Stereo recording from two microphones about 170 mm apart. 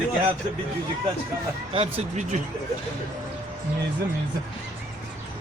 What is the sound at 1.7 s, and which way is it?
Speech, 40° right (ahead or behind).